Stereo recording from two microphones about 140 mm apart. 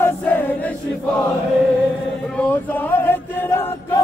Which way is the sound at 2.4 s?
15° left (ahead or behind).